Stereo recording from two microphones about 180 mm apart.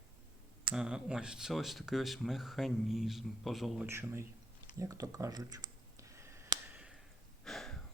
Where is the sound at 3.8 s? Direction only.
15° right (ahead or behind).